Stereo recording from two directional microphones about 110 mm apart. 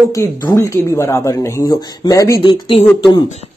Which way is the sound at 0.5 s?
25° left (ahead or behind).